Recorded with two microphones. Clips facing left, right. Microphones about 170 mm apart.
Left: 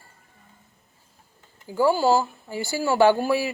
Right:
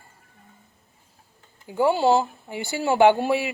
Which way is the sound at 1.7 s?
25° right (ahead or behind).